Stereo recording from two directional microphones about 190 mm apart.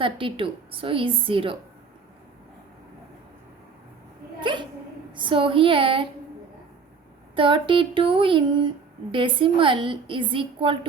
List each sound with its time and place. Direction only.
0.0 s a woman's voice: 25° right (ahead or behind)
4.4 s hiccup: 25° right (ahead or behind)
5.1 s a woman's voice: 25° right (ahead or behind)
7.3 s a woman's voice: 25° right (ahead or behind)